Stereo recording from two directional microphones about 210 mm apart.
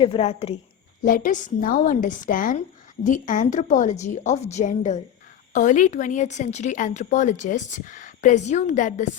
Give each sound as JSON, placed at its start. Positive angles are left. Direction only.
{"t": 0.0, "sound": "a woman's voice", "side_deg": 25}
{"t": 1.0, "sound": "speech", "side_deg": 40}